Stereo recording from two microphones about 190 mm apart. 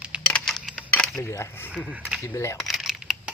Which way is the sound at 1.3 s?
15° left (ahead or behind).